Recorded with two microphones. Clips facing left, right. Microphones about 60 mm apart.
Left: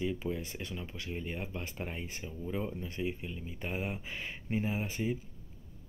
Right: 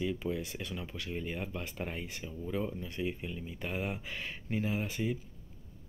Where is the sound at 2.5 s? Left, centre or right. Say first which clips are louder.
Right 1 dB; centre.